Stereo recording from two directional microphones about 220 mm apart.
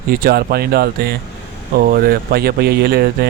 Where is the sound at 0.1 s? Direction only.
45° right (ahead or behind).